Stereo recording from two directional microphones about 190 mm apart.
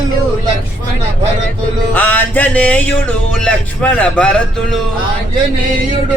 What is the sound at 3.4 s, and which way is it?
Speech, 5° left (ahead or behind).